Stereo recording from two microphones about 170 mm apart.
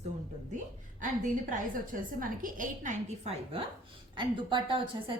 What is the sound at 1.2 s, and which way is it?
A woman's voice, 50° right (ahead or behind).